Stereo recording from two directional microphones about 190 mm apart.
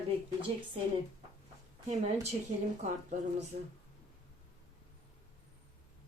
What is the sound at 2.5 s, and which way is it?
Speech, 35° right (ahead or behind).